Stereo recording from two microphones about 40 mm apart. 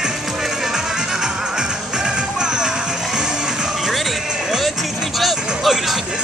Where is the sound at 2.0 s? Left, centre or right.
Centre.